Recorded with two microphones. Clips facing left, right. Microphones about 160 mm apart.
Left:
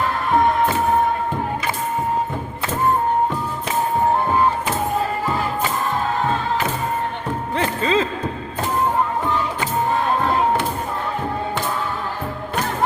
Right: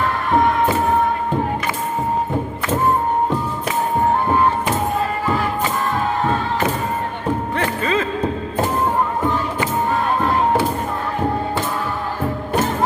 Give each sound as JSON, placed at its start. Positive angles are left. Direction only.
{"t": 7.5, "sound": "music", "side_deg": 30}